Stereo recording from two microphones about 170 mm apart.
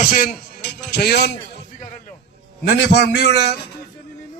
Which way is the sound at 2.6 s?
75° left (ahead or behind).